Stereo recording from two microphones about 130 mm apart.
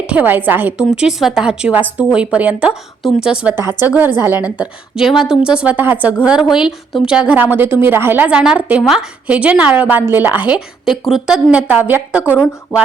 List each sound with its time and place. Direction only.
0.1 s a woman's voice: 15° right (ahead or behind)
10.8 s a woman's voice: 5° right (ahead or behind)